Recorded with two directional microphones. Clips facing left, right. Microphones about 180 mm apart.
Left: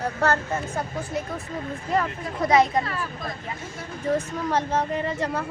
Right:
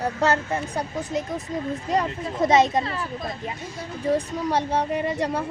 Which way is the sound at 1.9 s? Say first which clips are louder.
Even; 20° right (ahead or behind).